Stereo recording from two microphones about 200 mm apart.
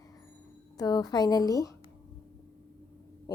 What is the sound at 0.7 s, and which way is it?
A woman's voice, 20° left (ahead or behind).